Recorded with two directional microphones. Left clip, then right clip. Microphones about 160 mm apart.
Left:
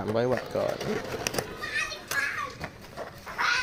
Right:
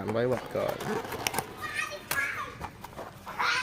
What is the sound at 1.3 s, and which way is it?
Children playing, 25° right (ahead or behind).